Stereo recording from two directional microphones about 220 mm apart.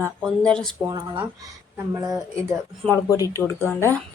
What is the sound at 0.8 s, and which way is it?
Speech, 15° right (ahead or behind).